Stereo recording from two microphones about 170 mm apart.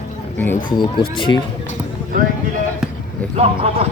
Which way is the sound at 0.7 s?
30° left (ahead or behind).